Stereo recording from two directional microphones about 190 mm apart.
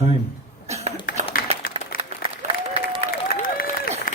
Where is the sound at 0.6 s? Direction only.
35° right (ahead or behind).